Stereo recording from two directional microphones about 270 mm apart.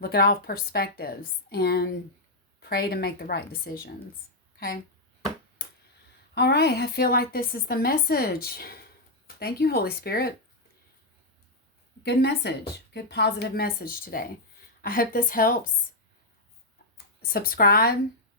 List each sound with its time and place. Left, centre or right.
0.0 s a woman's voice: left
6.3 s a woman's voice: left
12.0 s a woman's voice: left
17.2 s a woman's voice: left